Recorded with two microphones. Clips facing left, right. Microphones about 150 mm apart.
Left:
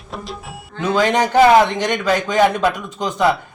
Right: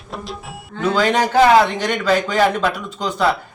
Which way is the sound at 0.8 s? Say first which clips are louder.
Even; 10° left (ahead or behind).